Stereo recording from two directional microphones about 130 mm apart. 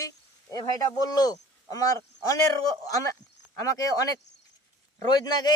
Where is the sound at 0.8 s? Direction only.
30° left (ahead or behind).